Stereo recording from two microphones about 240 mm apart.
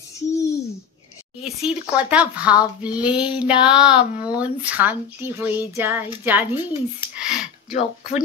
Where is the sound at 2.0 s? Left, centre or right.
Centre.